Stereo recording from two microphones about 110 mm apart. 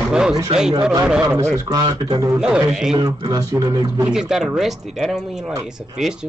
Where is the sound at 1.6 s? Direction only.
35° right (ahead or behind).